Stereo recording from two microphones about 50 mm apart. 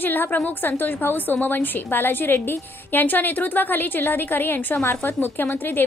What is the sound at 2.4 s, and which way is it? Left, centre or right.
Speech, left.